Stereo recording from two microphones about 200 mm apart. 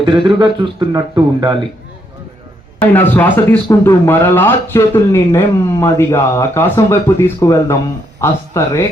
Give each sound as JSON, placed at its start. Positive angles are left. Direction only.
{"t": 0.0, "sound": "speech", "side_deg": -25}
{"t": 2.8, "sound": "speech", "side_deg": 10}